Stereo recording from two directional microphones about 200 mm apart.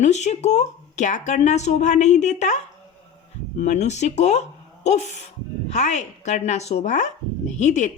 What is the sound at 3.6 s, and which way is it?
Speech, 35° left (ahead or behind).